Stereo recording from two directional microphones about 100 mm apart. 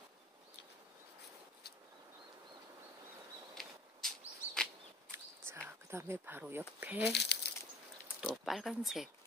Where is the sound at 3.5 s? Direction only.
5° left (ahead or behind).